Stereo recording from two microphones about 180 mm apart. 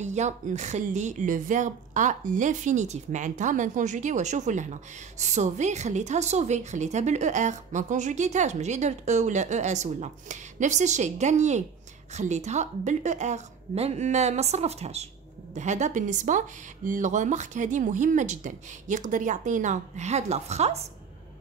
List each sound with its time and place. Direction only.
0.0 s a woman's voice: 40° right (ahead or behind)